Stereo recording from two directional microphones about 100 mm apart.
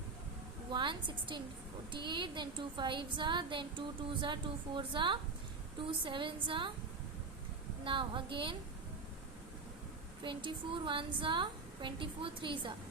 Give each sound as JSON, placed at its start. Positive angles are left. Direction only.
{"t": 0.7, "sound": "a woman's voice", "side_deg": -55}
{"t": 7.9, "sound": "a woman's voice", "side_deg": -55}
{"t": 10.2, "sound": "a woman's voice", "side_deg": -55}